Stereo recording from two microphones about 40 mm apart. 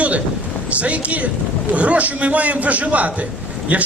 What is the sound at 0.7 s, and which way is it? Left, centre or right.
A man's voice, right.